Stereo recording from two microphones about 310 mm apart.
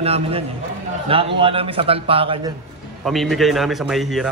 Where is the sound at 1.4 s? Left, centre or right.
Centre.